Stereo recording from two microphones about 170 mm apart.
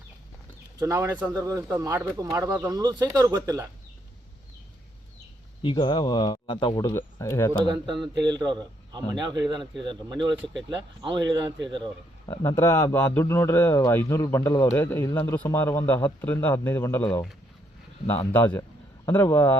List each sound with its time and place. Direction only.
0.8 s speech: 15° right (ahead or behind)
5.6 s speech: 30° left (ahead or behind)
6.9 s a man's voice: 15° left (ahead or behind)
7.6 s speech: 30° right (ahead or behind)
12.3 s a man's voice: 15° left (ahead or behind)
18.1 s a man's voice: 10° left (ahead or behind)